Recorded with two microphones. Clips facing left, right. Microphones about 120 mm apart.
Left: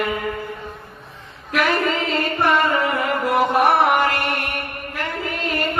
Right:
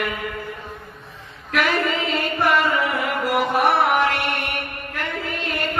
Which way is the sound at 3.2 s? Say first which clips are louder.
Left 2 dB; centre (ahead or behind).